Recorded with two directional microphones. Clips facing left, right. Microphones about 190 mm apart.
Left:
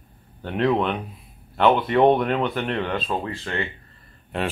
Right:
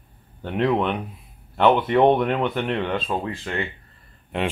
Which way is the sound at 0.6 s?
10° right (ahead or behind).